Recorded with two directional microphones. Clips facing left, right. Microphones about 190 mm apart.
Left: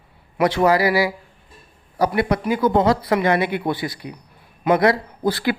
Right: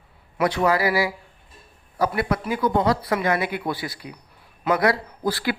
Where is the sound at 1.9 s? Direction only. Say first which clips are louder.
Left 4 dB; 35° left (ahead or behind).